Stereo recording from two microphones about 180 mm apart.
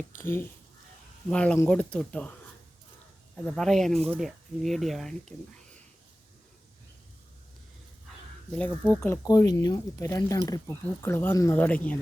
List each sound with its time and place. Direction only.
1.3 s speech: 5° left (ahead or behind)
3.3 s speech: 5° left (ahead or behind)
8.9 s speech: 15° left (ahead or behind)